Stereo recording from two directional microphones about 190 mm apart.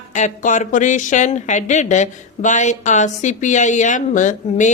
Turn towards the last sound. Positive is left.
turn(degrees=40)  # may be behind; listen again after turning